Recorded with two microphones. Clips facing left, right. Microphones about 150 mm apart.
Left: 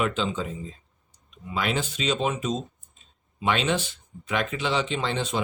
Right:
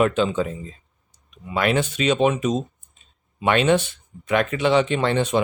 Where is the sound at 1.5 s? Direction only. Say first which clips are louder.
Right 6 dB; 60° right (ahead or behind).